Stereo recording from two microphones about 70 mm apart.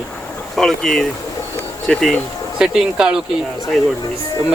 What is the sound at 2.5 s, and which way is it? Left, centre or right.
Speech, centre.